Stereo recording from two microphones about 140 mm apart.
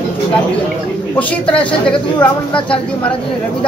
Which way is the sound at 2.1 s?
35° left (ahead or behind).